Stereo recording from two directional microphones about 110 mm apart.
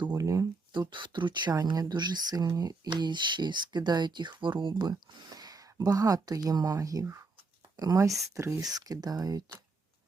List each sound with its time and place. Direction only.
0.1 s speech: 30° right (ahead or behind)